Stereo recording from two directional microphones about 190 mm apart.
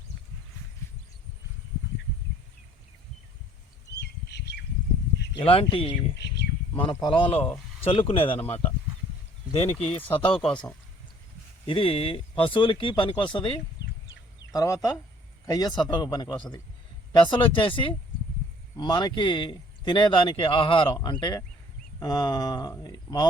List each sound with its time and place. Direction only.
4.0 s squawk: 60° left (ahead or behind)
5.4 s speech: 30° left (ahead or behind)
6.1 s a sound: 65° left (ahead or behind)
6.7 s speech: 25° left (ahead or behind)
7.4 s a sound: 10° left (ahead or behind)
7.9 s speech: 30° left (ahead or behind)
9.9 s speech: 30° left (ahead or behind)
11.6 s speech: 30° left (ahead or behind)